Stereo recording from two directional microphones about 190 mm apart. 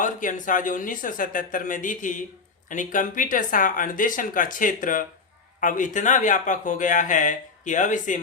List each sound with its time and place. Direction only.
0.0 s speech: 45° left (ahead or behind)